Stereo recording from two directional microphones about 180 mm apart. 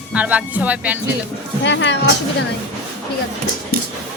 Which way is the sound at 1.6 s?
85° left.